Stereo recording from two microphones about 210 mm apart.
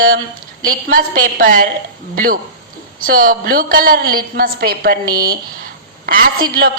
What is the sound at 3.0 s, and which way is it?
A woman's voice, 45° right (ahead or behind).